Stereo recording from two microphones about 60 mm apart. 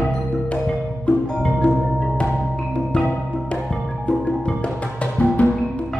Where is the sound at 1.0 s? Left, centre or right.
Centre.